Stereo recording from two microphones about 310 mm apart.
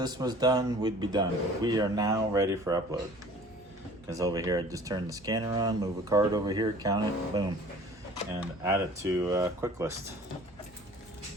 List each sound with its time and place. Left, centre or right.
0.0 s speech: centre
4.1 s speech: centre